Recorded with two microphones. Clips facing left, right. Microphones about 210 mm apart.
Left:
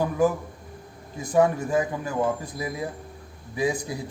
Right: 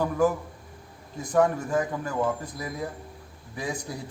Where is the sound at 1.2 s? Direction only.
10° left (ahead or behind).